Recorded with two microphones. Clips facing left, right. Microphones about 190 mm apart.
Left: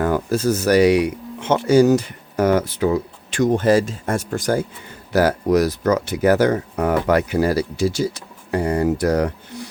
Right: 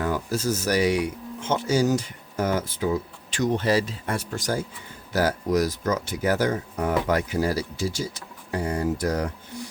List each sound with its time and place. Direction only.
0.0 s speech: 55° left (ahead or behind)
5.1 s speech: 65° left (ahead or behind)